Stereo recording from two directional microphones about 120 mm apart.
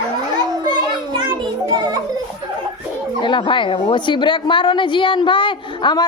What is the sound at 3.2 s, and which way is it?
A woman's voice, 40° left (ahead or behind).